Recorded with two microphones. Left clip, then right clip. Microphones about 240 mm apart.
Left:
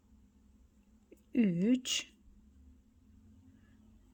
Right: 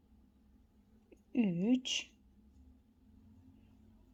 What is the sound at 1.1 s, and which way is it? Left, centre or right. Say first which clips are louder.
Speech: left 3 dB; centre.